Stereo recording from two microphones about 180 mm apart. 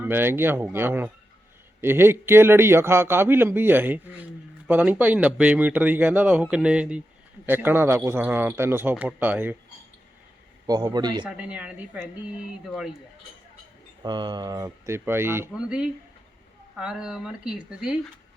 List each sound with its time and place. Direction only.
0.0 s speech: 10° right (ahead or behind)
10.7 s speech: 20° right (ahead or behind)
11.3 s speech: 5° right (ahead or behind)
14.0 s speech: 25° right (ahead or behind); by 17.9 s 5° right (ahead or behind)